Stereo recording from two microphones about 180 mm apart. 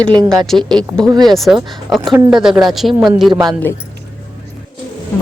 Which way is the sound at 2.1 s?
5° right (ahead or behind).